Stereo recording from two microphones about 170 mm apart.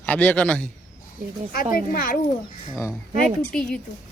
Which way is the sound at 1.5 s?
60° left (ahead or behind).